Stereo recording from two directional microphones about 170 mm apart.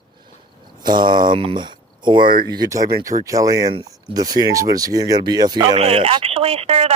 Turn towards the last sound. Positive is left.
turn(degrees=-35)  # may be behind; listen again after turning